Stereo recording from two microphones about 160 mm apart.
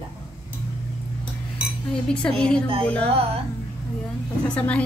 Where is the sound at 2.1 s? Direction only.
5° left (ahead or behind).